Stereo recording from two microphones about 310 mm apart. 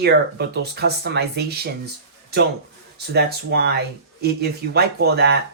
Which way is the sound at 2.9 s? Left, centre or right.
Right.